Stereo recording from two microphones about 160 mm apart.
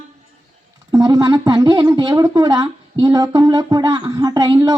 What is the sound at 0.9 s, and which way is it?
Speech, 20° right (ahead or behind).